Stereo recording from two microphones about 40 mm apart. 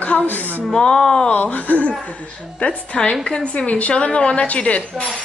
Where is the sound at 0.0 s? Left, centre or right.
Left.